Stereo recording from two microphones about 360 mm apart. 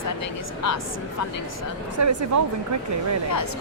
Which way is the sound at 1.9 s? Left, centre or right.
Right.